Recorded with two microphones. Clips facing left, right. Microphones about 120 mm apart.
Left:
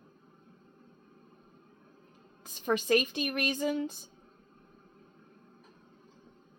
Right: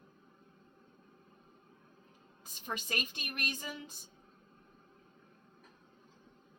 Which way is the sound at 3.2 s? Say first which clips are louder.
Left 11 dB; 90° left.